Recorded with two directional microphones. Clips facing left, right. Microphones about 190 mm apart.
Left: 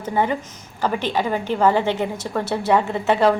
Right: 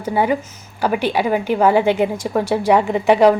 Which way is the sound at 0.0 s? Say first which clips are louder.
Right 3 dB; 10° right (ahead or behind).